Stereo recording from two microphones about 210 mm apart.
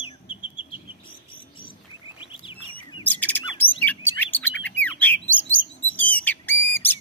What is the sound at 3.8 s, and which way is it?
Chirp, 10° left (ahead or behind).